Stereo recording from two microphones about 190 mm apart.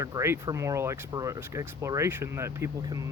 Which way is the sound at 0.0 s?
15° right (ahead or behind).